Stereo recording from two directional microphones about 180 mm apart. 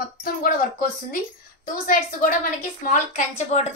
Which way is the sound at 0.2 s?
50° left (ahead or behind).